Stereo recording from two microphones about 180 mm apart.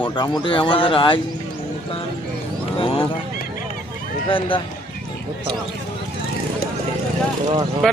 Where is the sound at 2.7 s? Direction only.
30° left (ahead or behind).